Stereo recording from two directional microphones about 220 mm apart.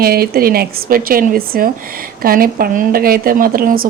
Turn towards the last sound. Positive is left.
turn(degrees=-40)  # may be behind; listen again after turning